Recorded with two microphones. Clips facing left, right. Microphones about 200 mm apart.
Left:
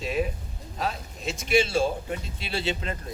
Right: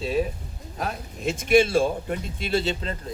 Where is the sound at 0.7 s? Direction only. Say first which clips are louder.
Even; 50° right (ahead or behind).